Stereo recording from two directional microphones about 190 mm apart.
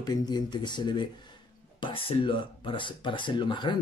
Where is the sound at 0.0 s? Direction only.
20° left (ahead or behind).